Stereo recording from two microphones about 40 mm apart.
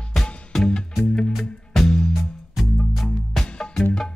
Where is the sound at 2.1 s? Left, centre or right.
Centre.